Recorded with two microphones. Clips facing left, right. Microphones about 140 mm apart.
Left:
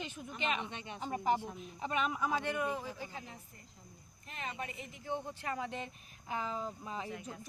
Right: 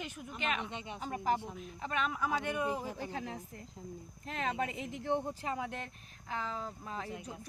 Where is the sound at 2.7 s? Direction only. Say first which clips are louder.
Right 2 dB; 35° right (ahead or behind).